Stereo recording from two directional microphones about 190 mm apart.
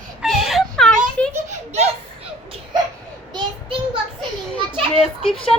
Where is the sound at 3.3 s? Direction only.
25° right (ahead or behind).